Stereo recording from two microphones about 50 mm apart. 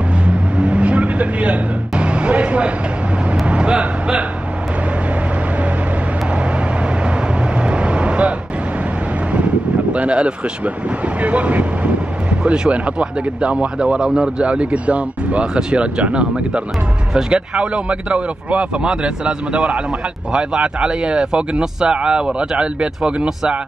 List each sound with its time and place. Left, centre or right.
0.2 s vehicle: right
7.5 s vehicle: right
9.9 s speech: right
12.3 s speech: centre
14.5 s speech: right